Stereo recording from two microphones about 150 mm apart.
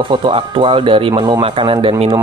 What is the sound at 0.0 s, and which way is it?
Speech, 35° right (ahead or behind).